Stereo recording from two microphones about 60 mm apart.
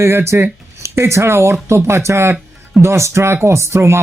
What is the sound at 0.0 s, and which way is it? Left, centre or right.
Speech, right.